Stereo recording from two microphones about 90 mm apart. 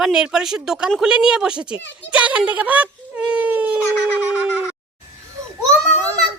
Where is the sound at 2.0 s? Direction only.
15° right (ahead or behind).